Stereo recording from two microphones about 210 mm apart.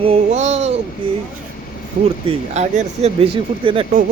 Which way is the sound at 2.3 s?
35° right (ahead or behind).